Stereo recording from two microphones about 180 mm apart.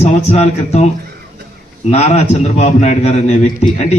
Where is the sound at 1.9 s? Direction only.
35° left (ahead or behind).